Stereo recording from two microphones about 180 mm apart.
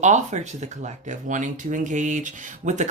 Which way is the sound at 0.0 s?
40° right (ahead or behind).